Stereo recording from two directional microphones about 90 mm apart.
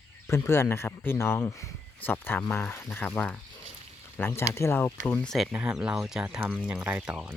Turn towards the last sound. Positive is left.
turn(degrees=-10)  # may be behind; listen again after turning